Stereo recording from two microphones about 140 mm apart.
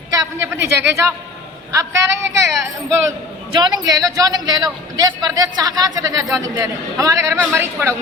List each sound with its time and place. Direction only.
0.1 s a man's voice: 20° right (ahead or behind)
3.5 s a man's voice: 30° right (ahead or behind)